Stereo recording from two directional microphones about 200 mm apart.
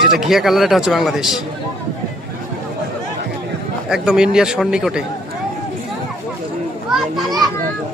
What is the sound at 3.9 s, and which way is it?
Speech, 5° right (ahead or behind).